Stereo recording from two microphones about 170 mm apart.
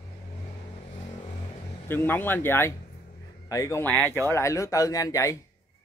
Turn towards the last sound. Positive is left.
turn(degrees=20)  # may be behind; listen again after turning